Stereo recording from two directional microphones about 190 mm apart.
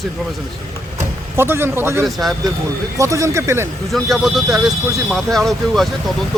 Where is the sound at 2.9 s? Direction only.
15° right (ahead or behind).